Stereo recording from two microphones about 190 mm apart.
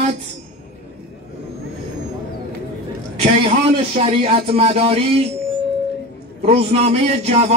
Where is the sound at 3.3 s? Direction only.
30° right (ahead or behind).